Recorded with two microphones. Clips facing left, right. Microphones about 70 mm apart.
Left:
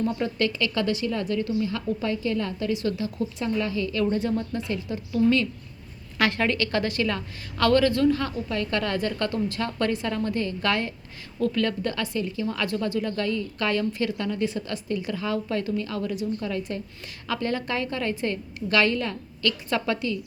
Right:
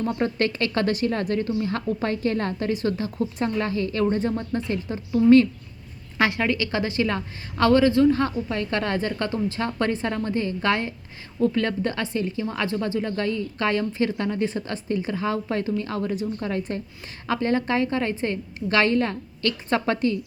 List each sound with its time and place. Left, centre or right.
0.0 s a woman's voice: right
6.1 s a woman's voice: centre; by 20.1 s right